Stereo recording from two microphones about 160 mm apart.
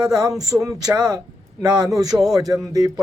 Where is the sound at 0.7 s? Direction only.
25° right (ahead or behind).